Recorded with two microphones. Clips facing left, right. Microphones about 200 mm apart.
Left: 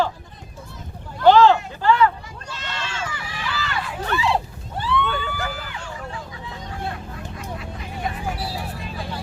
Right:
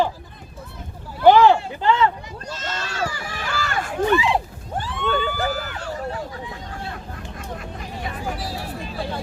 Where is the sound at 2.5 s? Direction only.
40° right (ahead or behind).